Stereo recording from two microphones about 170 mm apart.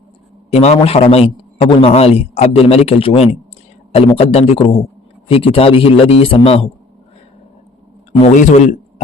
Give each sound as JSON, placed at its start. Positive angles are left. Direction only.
{"t": 0.5, "sound": "a man's voice", "side_deg": 35}
{"t": 8.2, "sound": "speech", "side_deg": 45}